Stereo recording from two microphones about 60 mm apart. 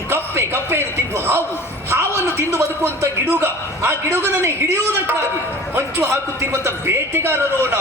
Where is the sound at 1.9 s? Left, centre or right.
Right.